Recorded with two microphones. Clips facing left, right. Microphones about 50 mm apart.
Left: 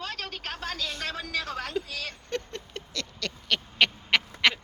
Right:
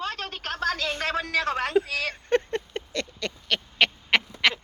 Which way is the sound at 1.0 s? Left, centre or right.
Right.